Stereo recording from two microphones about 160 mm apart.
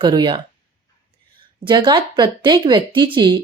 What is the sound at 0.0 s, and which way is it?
Speech, 30° right (ahead or behind).